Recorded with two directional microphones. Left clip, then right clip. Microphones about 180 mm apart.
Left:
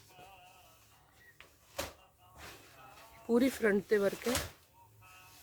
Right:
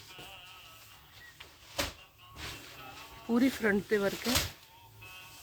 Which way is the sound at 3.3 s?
55° left (ahead or behind).